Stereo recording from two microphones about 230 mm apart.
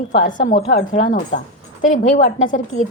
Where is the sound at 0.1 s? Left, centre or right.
Left.